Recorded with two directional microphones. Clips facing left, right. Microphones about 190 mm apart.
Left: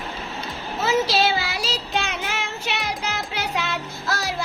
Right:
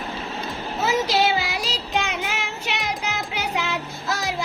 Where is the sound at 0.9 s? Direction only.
15° right (ahead or behind).